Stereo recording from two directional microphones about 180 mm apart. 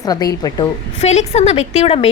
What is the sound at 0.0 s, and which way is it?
Speech, 20° left (ahead or behind).